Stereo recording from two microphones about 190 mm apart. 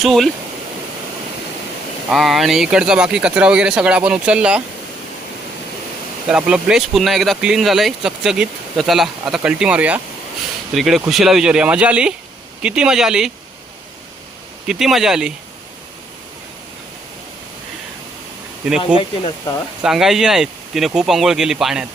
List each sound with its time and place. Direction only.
0.0 s speech: centre (ahead or behind)
2.0 s speech: centre (ahead or behind)
6.2 s speech: 5° right (ahead or behind)
14.7 s speech: centre (ahead or behind)
18.9 s speech: 25° left (ahead or behind)
19.8 s speech: centre (ahead or behind)